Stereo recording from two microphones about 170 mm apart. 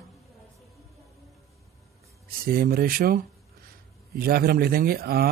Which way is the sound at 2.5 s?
60° right (ahead or behind).